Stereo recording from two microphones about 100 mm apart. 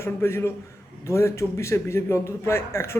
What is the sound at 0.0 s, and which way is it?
A man's voice, 25° left (ahead or behind).